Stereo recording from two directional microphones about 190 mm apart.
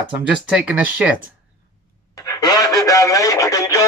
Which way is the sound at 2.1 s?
20° left (ahead or behind).